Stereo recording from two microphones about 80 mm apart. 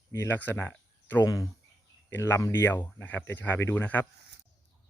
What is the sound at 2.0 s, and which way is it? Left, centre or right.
Speech, left.